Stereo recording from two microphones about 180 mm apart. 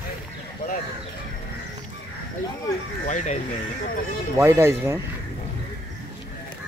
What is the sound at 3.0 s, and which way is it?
Speech, 45° left (ahead or behind).